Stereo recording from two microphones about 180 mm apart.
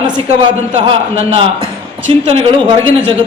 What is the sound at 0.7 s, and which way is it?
A man's voice, 30° right (ahead or behind).